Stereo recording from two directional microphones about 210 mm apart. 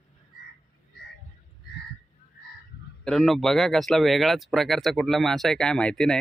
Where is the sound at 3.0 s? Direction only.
Centre (ahead or behind).